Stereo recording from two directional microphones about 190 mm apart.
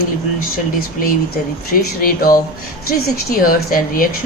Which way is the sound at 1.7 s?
50° left (ahead or behind).